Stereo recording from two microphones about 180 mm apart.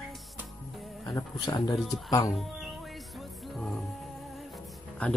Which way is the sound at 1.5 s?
20° left (ahead or behind).